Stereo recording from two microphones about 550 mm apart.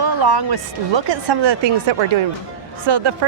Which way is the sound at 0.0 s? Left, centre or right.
Right.